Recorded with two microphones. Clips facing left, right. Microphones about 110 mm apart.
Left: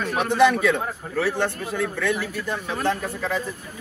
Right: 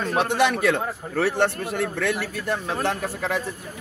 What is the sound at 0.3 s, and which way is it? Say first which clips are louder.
A man's voice: left 5 dB; 70° right (ahead or behind).